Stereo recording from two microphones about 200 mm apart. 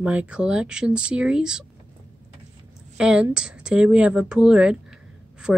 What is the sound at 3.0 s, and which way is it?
Speech, 5° right (ahead or behind).